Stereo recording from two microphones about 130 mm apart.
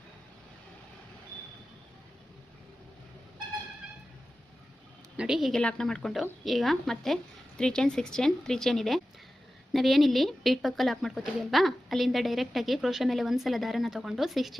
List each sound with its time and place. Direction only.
5.1 s a woman's voice: 5° right (ahead or behind)